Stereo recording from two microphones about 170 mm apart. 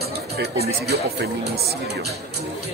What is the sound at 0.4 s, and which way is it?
Speech, 70° right (ahead or behind).